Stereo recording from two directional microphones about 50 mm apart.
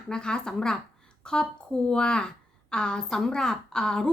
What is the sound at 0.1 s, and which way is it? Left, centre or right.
A woman's voice, centre.